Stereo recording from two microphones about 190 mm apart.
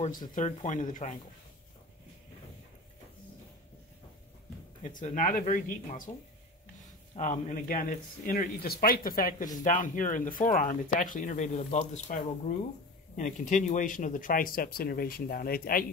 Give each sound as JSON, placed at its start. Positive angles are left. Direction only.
{"t": 0.3, "sound": "speech", "side_deg": 40}
{"t": 4.9, "sound": "speech", "side_deg": 45}